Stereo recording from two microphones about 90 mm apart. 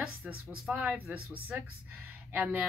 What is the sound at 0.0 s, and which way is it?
Speech, 10° right (ahead or behind).